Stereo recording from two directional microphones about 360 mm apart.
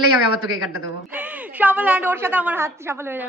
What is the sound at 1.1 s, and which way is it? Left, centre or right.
A woman's voice, centre.